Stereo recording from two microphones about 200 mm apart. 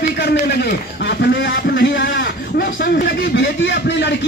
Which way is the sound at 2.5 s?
45° left (ahead or behind).